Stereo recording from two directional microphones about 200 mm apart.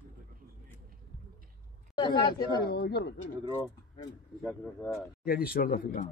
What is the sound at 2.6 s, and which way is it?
Speech, 50° left (ahead or behind).